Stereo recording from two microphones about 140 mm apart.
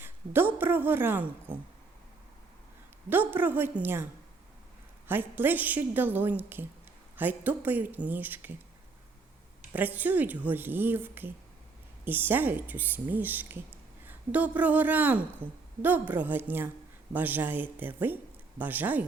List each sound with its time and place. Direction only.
0.0 s a woman's voice: 15° right (ahead or behind)
3.1 s a woman's voice: 15° right (ahead or behind)
9.7 s a woman's voice: 10° right (ahead or behind)